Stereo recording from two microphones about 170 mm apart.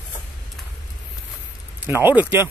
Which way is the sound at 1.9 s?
10° right (ahead or behind).